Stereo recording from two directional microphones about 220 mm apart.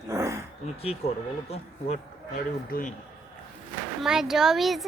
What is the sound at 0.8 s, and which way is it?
A child's voice, 25° left (ahead or behind).